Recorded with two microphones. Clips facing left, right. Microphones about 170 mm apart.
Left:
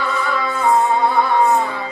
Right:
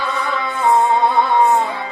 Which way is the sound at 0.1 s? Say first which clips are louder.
Left 1 dB; 20° right (ahead or behind).